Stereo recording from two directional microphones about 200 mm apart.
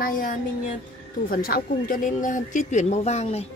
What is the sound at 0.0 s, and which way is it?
Speech, 40° left (ahead or behind).